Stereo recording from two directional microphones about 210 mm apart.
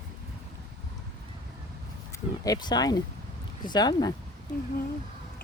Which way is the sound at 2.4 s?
20° left (ahead or behind).